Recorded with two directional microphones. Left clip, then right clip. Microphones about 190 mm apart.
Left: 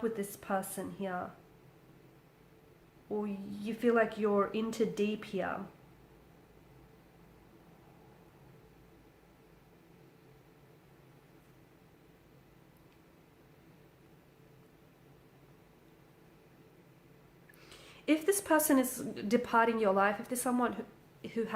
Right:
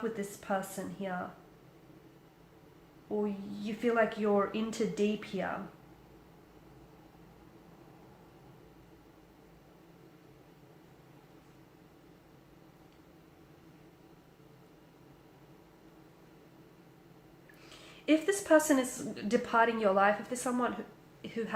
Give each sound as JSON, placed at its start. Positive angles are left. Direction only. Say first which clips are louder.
{"t": 0.0, "sound": "a woman's voice", "louder": "left 1 dB", "side_deg": 40}
{"t": 3.2, "sound": "a woman's voice", "louder": "right 5 dB", "side_deg": 40}
{"t": 17.7, "sound": "a woman's voice", "louder": "right 3 dB", "side_deg": 35}